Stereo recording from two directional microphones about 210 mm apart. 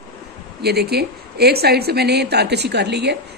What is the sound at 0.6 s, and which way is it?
Speech, 50° right (ahead or behind).